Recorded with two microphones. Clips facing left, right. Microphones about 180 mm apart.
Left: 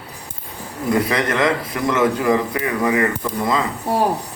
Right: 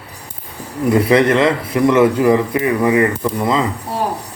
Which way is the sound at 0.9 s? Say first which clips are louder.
Right 7 dB; 25° right (ahead or behind).